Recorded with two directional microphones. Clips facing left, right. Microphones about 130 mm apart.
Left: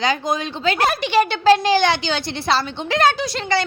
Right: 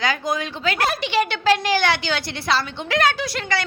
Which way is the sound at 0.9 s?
45° left (ahead or behind).